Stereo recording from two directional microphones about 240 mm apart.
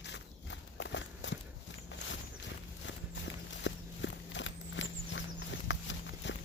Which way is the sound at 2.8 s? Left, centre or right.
Left.